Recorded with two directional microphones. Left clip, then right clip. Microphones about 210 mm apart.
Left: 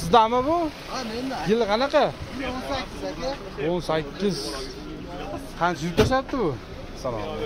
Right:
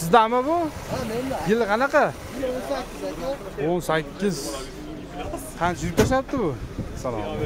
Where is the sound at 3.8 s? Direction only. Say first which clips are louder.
Right 1 dB; 15° right (ahead or behind).